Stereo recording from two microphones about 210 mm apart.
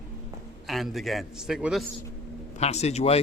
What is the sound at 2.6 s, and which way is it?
Speech, 30° left (ahead or behind).